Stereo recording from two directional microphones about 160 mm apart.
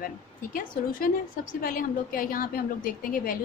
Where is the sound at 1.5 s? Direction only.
60° left (ahead or behind).